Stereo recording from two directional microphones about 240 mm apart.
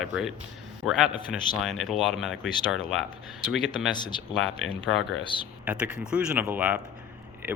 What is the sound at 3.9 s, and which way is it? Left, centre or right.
Speech, centre.